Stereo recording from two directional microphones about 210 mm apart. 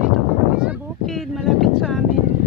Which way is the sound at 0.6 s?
Centre (ahead or behind).